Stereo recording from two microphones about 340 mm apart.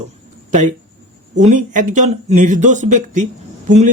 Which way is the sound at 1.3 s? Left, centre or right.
Right.